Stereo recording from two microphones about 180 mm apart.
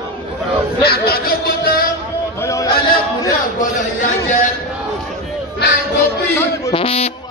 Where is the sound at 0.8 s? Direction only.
55° left (ahead or behind).